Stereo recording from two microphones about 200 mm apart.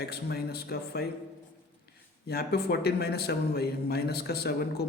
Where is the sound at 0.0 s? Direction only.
55° left (ahead or behind).